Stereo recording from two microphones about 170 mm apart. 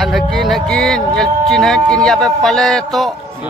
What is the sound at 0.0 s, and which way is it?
Speech, centre (ahead or behind).